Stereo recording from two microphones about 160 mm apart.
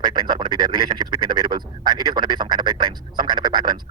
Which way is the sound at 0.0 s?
30° right (ahead or behind).